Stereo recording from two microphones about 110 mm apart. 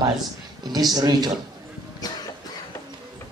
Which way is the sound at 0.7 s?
40° right (ahead or behind).